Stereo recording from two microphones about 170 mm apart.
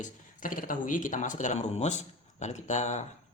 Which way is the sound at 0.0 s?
50° left (ahead or behind).